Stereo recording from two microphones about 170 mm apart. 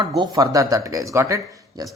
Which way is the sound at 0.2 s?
25° right (ahead or behind).